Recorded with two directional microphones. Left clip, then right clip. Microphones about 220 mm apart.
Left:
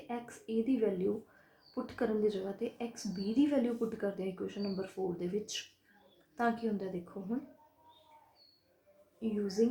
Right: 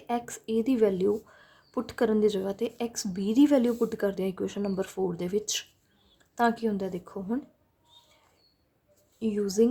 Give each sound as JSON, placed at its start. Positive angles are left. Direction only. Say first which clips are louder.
{"t": 0.1, "sound": "a woman's voice", "louder": "right 9 dB", "side_deg": -40}
{"t": 9.3, "sound": "a woman's voice", "louder": "right 7 dB", "side_deg": -40}